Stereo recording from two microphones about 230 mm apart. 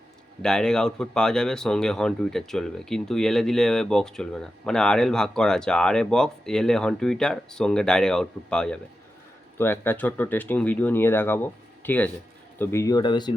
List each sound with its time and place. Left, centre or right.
0.4 s speech: centre